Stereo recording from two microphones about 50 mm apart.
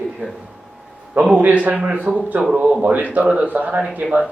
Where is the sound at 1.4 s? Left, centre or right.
Right.